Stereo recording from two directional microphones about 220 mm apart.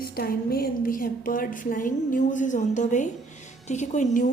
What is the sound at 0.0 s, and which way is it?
A woman's voice, 45° left (ahead or behind).